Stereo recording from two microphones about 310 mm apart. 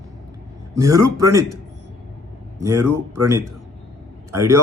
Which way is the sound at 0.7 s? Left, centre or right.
Centre.